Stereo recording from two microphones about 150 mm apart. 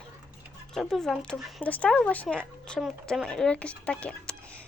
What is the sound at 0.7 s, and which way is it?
Speech, 5° left (ahead or behind).